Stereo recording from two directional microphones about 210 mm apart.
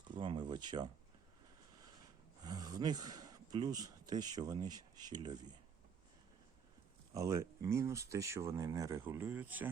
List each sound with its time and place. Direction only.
0.1 s speech: 20° right (ahead or behind)
2.4 s speech: 20° right (ahead or behind)
7.1 s speech: 15° right (ahead or behind)